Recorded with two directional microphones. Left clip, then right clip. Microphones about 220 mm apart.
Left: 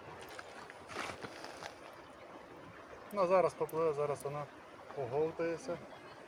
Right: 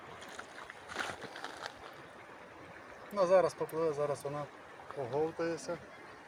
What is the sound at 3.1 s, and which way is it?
Speech, 45° right (ahead or behind).